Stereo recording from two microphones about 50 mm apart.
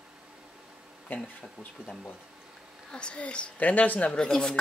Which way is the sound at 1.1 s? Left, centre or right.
Left.